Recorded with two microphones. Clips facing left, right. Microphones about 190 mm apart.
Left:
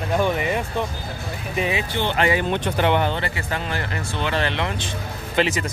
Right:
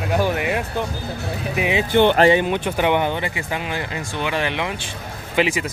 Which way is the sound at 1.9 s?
55° right (ahead or behind).